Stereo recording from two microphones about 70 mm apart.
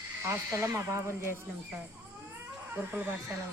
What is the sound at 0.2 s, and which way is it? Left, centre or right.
Speech, right.